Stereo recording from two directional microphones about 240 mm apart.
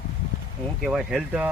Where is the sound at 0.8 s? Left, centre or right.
Centre.